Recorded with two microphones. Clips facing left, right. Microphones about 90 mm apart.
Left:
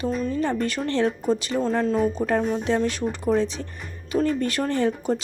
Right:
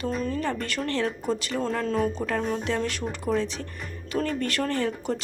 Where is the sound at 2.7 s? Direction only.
25° left (ahead or behind).